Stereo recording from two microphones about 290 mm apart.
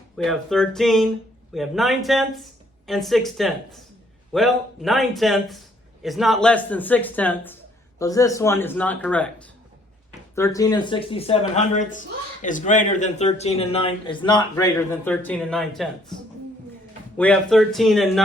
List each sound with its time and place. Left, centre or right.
0.2 s a man's voice: centre
10.3 s speech: centre
17.2 s a man's voice: centre